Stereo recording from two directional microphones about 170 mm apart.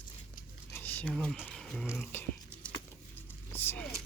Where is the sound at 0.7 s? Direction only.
10° left (ahead or behind).